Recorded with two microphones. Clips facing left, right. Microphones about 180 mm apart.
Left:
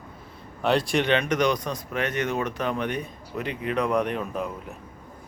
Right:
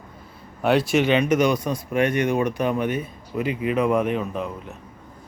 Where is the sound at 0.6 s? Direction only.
5° right (ahead or behind).